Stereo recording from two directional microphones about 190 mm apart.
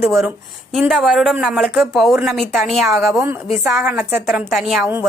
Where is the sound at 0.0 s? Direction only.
Centre (ahead or behind).